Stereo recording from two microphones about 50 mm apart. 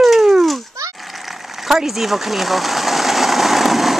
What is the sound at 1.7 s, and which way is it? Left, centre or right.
Sewing machine, centre.